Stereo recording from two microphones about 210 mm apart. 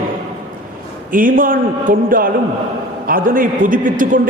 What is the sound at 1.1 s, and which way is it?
A man's voice, 40° right (ahead or behind).